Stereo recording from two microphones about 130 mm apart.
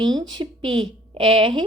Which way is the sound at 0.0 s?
35° right (ahead or behind).